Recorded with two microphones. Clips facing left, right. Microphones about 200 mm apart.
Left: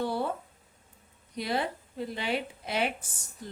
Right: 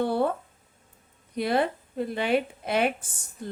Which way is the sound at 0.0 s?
55° right (ahead or behind).